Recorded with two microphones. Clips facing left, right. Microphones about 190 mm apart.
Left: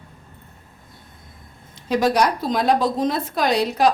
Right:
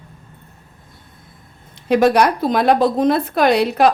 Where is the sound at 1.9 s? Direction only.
60° right (ahead or behind).